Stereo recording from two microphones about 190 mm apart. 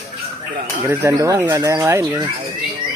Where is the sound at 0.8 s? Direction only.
15° right (ahead or behind).